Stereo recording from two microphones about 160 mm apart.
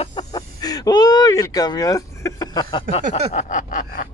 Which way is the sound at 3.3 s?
55° left (ahead or behind).